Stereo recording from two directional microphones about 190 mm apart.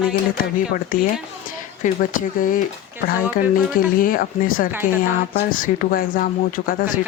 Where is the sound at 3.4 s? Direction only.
50° left (ahead or behind).